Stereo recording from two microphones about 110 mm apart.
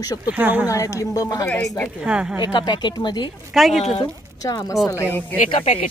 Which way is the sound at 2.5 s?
45° left (ahead or behind).